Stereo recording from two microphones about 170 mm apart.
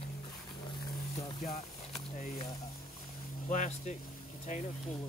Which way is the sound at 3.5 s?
45° left (ahead or behind).